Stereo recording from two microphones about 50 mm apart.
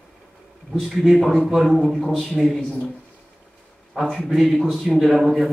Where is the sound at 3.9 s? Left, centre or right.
Centre.